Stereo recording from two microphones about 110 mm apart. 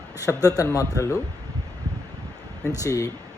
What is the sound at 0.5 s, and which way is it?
Speech, 30° left (ahead or behind).